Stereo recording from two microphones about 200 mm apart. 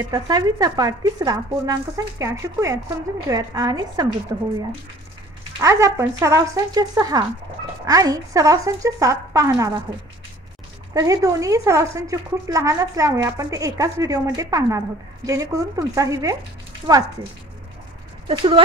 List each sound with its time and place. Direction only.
0.1 s a woman's voice: 20° right (ahead or behind)
18.3 s a woman's voice: 25° right (ahead or behind)